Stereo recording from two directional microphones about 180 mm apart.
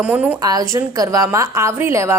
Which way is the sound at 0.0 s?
10° right (ahead or behind).